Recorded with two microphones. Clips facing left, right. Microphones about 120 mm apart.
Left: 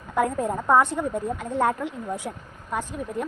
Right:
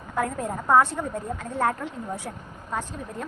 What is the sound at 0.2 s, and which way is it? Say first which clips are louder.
A woman's voice: left 4 dB; 15° left (ahead or behind).